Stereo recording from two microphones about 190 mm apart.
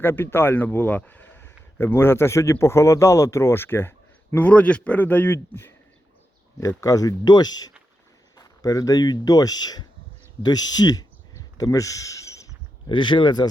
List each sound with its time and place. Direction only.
0.0 s speech: 10° left (ahead or behind)